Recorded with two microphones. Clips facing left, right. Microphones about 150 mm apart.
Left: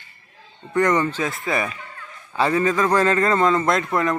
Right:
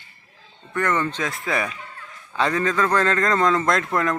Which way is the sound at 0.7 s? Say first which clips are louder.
Left 4 dB; 15° left (ahead or behind).